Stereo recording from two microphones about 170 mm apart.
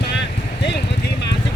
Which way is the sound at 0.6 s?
90° left.